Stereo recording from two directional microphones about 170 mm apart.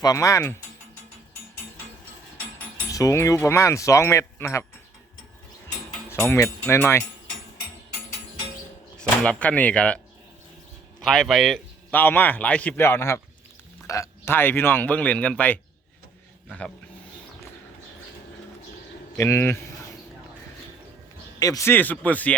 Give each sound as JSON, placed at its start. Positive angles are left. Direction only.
{"t": 0.0, "sound": "speech", "side_deg": 20}
{"t": 2.9, "sound": "a man's voice", "side_deg": 20}
{"t": 6.1, "sound": "a man's voice", "side_deg": 15}
{"t": 9.0, "sound": "a man's voice", "side_deg": 5}
{"t": 11.0, "sound": "a man's voice", "side_deg": 0}
{"t": 19.1, "sound": "a man's voice", "side_deg": 15}
{"t": 21.3, "sound": "a man's voice", "side_deg": 20}